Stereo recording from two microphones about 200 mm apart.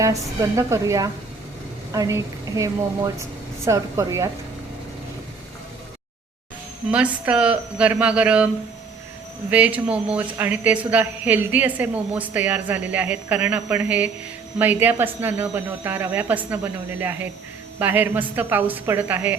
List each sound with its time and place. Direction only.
0.0 s a woman's voice: 15° right (ahead or behind)
6.9 s a woman's voice: 5° right (ahead or behind)
9.5 s a woman's voice: 5° right (ahead or behind)